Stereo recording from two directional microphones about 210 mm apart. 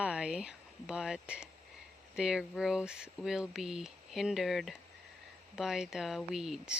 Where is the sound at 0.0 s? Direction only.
5° right (ahead or behind).